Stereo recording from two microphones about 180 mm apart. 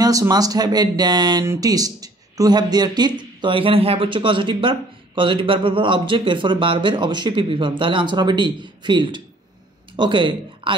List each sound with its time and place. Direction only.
0.0 s speech: 20° right (ahead or behind)